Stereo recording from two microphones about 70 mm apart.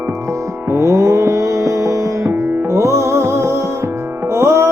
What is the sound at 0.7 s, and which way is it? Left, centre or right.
Music, right.